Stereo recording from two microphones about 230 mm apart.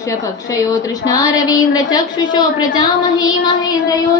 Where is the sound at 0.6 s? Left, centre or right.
Centre.